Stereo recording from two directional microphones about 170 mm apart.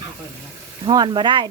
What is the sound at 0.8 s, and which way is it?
Speech, 25° right (ahead or behind).